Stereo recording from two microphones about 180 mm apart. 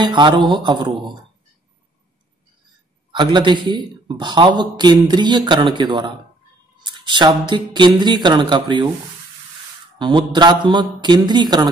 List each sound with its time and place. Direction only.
0.0 s a man's voice: 25° right (ahead or behind)
3.1 s a man's voice: 25° right (ahead or behind)
9.9 s a man's voice: 25° right (ahead or behind)